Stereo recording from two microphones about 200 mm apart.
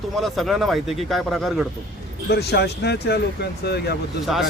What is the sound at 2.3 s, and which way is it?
Speech, 55° left (ahead or behind).